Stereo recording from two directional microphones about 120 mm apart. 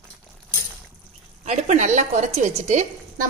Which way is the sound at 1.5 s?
80° right.